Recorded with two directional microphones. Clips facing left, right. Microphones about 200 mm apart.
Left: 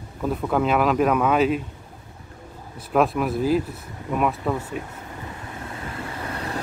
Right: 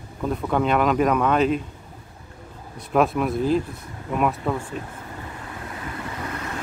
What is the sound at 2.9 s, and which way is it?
Speech, centre (ahead or behind).